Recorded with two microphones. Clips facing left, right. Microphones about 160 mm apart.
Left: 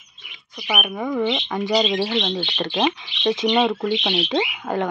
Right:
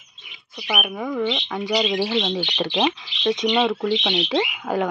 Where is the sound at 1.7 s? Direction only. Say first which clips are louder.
Left 2 dB; 20° left (ahead or behind).